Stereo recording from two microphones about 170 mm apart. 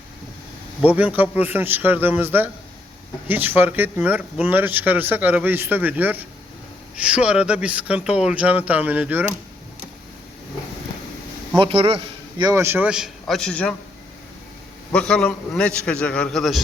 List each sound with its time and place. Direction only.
0.9 s speech: 10° right (ahead or behind)
11.5 s a man's voice: 35° right (ahead or behind)
12.4 s a man's voice: 20° right (ahead or behind); by 13.7 s 5° left (ahead or behind)
14.9 s a man's voice: 5° left (ahead or behind)